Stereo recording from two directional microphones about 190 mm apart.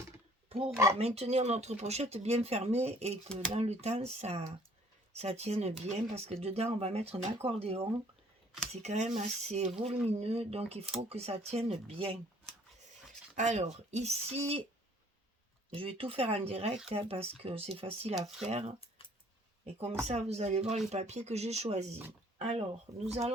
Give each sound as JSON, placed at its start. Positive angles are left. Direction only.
{"t": 0.4, "sound": "a sound", "side_deg": -30}
{"t": 0.9, "sound": "speech", "side_deg": -30}
{"t": 13.3, "sound": "speech", "side_deg": -40}
{"t": 15.7, "sound": "speech", "side_deg": -30}
{"t": 19.0, "sound": "a sound", "side_deg": 30}
{"t": 20.1, "sound": "speech", "side_deg": -35}